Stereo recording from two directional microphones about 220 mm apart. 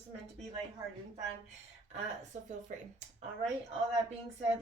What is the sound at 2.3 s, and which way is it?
Speech, 35° right (ahead or behind).